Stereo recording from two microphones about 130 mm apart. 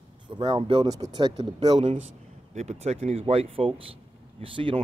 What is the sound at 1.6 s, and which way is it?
Speech, 55° right (ahead or behind).